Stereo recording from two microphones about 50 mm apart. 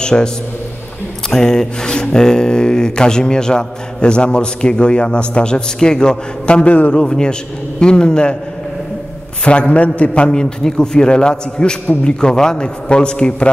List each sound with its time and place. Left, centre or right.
0.0 s a man's voice: centre
1.3 s speech: centre; by 7.0 s left
7.0 s a man's voice: centre
9.4 s speech: left